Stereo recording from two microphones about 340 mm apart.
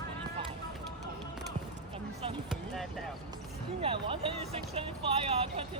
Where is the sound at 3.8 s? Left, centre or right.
Centre.